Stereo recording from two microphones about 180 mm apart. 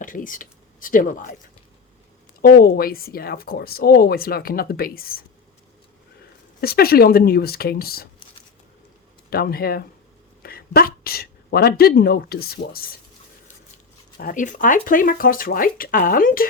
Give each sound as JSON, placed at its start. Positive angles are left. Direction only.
{"t": 0.0, "sound": "speech", "side_deg": 50}
{"t": 2.4, "sound": "speech", "side_deg": 55}
{"t": 6.6, "sound": "speech", "side_deg": 60}
{"t": 9.3, "sound": "speech", "side_deg": 55}
{"t": 14.2, "sound": "speech", "side_deg": 50}